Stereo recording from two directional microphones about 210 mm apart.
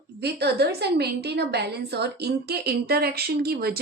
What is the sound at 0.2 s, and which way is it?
A woman's voice, 50° right (ahead or behind).